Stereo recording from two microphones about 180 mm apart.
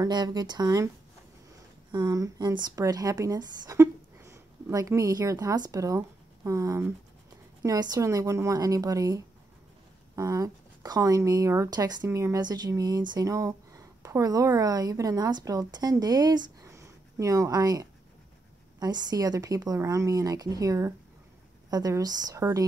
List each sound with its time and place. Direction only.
0.0 s a woman's voice: 25° right (ahead or behind)
1.9 s a woman's voice: 20° right (ahead or behind)